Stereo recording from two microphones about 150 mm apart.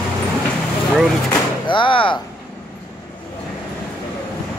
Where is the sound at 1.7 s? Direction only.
35° left (ahead or behind).